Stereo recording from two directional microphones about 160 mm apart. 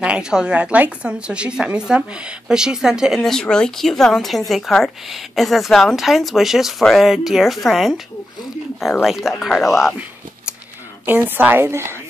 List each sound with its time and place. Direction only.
0.0 s a woman's voice: 5° right (ahead or behind)
9.0 s a woman's voice: centre (ahead or behind)